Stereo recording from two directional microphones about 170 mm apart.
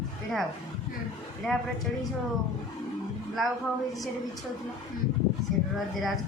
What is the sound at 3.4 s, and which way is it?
Speech, centre (ahead or behind).